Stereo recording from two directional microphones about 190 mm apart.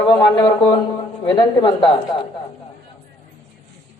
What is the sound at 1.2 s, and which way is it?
Speech, 25° left (ahead or behind).